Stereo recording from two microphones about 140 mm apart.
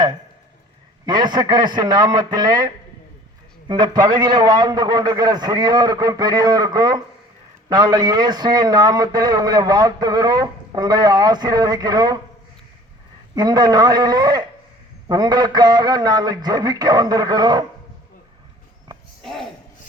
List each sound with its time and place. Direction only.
1.0 s a man's voice: 30° right (ahead or behind)
3.7 s a man's voice: 30° right (ahead or behind)
13.3 s a man's voice: 30° right (ahead or behind)
19.2 s a sound: centre (ahead or behind)